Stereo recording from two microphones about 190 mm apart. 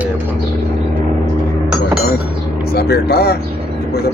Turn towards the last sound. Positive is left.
turn(degrees=55)  # may be behind; listen again after turning